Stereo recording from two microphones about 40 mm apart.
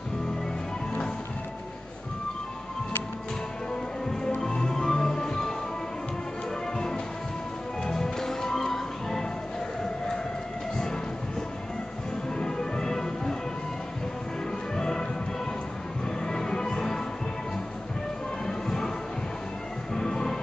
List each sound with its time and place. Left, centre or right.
4.4 s music: centre
7.8 s music: centre
12.4 s music: centre
14.8 s music: centre
16.3 s music: centre
18.5 s music: centre
19.9 s music: centre